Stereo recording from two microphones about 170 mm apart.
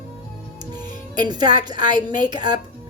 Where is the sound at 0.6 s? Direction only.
25° right (ahead or behind).